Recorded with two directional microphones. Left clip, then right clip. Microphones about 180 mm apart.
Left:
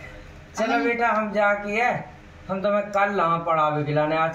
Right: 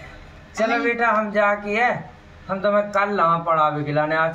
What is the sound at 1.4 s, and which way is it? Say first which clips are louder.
Speech: right 2 dB; 15° right (ahead or behind).